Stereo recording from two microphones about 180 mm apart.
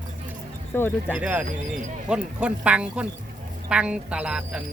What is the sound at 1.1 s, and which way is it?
Speech, 10° right (ahead or behind).